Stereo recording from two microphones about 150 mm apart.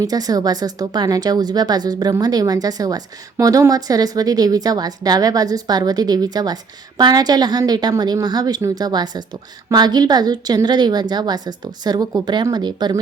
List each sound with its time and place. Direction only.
0.0 s a woman's voice: 25° right (ahead or behind)